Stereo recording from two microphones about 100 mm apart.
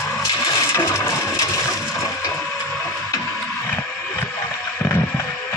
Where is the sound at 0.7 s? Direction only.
30° left (ahead or behind).